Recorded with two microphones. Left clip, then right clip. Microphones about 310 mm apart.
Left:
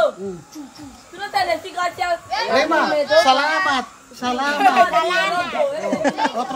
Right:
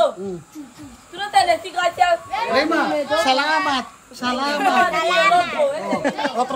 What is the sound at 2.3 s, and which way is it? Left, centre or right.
Speech, centre.